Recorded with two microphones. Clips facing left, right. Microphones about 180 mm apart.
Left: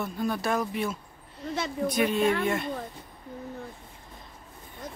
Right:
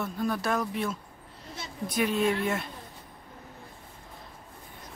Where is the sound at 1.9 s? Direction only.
Centre (ahead or behind).